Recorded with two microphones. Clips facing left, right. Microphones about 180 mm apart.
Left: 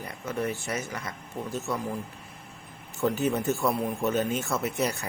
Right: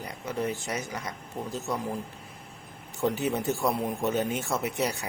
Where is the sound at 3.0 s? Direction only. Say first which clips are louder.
Left 1 dB; 15° right (ahead or behind).